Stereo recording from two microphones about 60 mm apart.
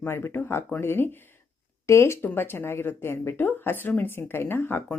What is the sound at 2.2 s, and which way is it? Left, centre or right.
Speech, left.